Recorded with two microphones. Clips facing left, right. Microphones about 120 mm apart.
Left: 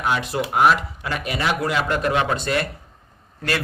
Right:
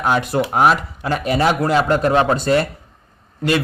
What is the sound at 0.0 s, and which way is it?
Speech, 45° right (ahead or behind).